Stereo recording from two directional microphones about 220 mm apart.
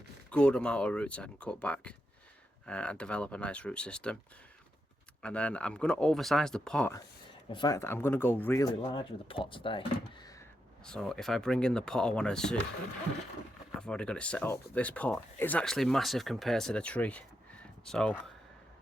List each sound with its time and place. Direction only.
0.3 s speech: 5° left (ahead or behind)
5.2 s speech: 5° left (ahead or behind)
7.5 s speech: 15° left (ahead or behind)
8.8 s speech: 25° left (ahead or behind)
10.8 s speech: 5° left (ahead or behind)
13.7 s speech: 5° left (ahead or behind)